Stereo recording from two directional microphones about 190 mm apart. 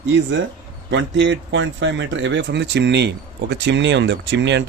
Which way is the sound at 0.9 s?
70° right (ahead or behind).